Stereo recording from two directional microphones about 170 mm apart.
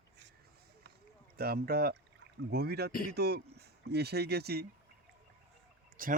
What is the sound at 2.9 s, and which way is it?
Speech, 55° left (ahead or behind).